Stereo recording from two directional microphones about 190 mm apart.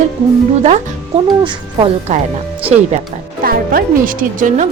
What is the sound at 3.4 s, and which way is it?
Speech, 50° right (ahead or behind).